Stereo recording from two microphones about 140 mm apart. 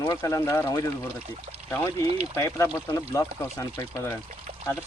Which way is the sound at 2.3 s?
20° left (ahead or behind).